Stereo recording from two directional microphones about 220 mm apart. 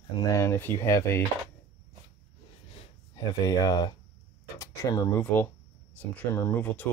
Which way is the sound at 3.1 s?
15° left (ahead or behind).